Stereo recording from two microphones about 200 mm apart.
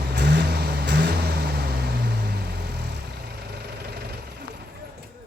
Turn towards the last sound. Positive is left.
turn(degrees=-50)  # may be behind; listen again after turning